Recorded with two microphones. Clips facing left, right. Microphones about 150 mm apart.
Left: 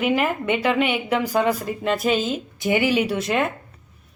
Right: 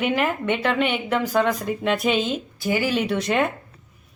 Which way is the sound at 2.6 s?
20° left (ahead or behind).